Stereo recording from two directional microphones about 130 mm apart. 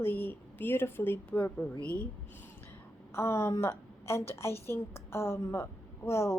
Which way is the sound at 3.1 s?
20° left (ahead or behind).